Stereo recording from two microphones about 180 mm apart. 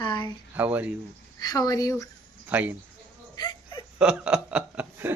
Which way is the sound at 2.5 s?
10° right (ahead or behind).